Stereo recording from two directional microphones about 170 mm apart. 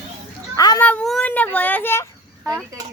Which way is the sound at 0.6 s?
20° left (ahead or behind).